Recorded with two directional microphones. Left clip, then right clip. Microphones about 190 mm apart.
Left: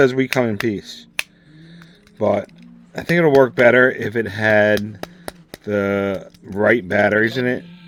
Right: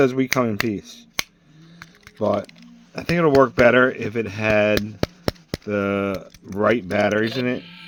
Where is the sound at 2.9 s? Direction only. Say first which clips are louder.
Left 3 dB; 5° right (ahead or behind).